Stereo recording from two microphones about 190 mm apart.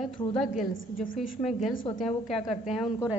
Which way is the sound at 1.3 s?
40° left (ahead or behind).